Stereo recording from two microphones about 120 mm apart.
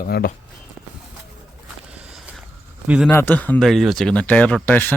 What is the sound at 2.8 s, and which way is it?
Speech, 10° right (ahead or behind).